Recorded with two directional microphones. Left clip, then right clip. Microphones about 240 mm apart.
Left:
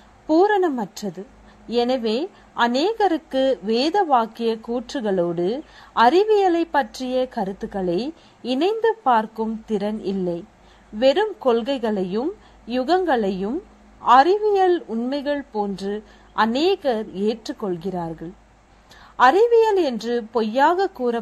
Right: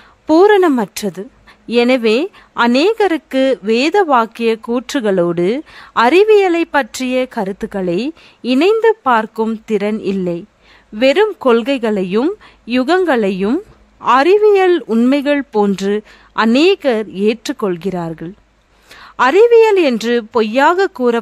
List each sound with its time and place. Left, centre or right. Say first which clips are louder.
0.3 s a woman's voice: right 8 dB; right